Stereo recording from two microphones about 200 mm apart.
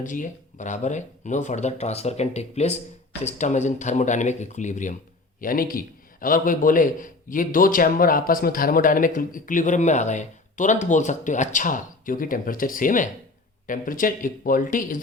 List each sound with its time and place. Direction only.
0.0 s a man's voice: 40° left (ahead or behind)